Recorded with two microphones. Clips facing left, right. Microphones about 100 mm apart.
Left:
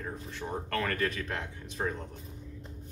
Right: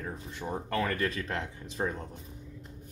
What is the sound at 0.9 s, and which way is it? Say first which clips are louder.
Speech: right 1 dB; 30° right (ahead or behind).